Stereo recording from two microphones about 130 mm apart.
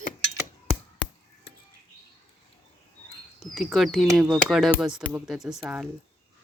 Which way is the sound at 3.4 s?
Centre (ahead or behind).